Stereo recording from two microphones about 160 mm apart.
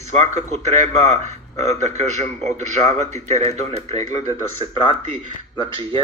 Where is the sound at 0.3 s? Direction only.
45° right (ahead or behind).